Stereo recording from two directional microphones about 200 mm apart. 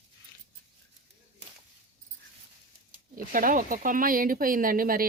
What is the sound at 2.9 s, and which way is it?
Speech, 45° right (ahead or behind).